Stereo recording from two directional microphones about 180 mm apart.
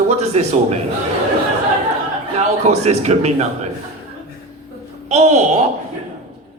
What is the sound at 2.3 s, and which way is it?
Speech, 35° right (ahead or behind).